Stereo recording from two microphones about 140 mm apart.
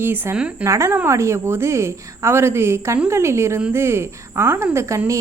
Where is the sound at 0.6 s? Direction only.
20° right (ahead or behind).